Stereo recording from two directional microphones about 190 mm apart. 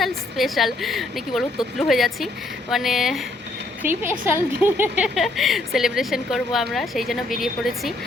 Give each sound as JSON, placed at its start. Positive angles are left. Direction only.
{"t": 0.0, "sound": "a woman's voice", "side_deg": 0}